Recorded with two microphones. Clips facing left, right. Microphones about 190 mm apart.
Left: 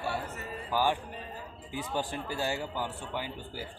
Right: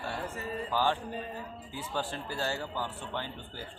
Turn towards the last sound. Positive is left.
turn(degrees=15)  # may be behind; listen again after turning